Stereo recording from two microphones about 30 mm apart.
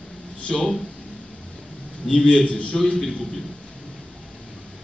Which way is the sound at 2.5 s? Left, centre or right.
Left.